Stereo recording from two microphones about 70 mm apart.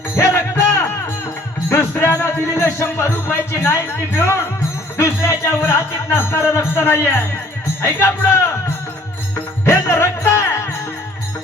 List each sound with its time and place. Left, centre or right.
0.2 s music: left
1.9 s speech: left
3.1 s music: left
3.6 s speech: left
4.9 s music: left
9.6 s music: left